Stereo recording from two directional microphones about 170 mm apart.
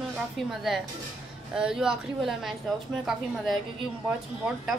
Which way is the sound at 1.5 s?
5° right (ahead or behind).